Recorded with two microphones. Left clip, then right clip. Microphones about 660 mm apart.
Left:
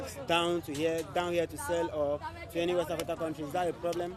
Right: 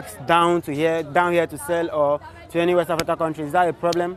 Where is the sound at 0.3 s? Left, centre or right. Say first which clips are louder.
Right 12 dB; right.